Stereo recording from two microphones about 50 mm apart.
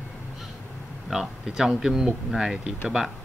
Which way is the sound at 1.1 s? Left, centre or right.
Centre.